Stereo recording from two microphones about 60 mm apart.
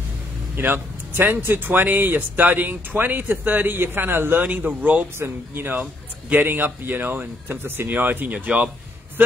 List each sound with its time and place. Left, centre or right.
0.6 s speech: right